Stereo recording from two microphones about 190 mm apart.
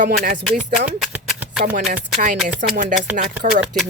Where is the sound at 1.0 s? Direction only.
5° right (ahead or behind).